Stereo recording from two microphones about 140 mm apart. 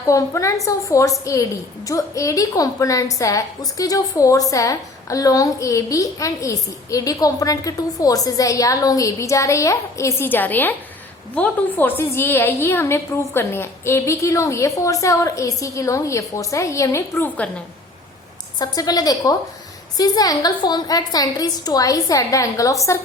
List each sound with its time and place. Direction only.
0.1 s a woman's voice: 20° left (ahead or behind)
18.6 s a woman's voice: 25° left (ahead or behind)